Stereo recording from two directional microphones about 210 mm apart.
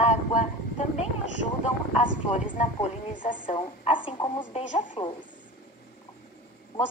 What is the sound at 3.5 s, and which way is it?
Speech, 25° left (ahead or behind).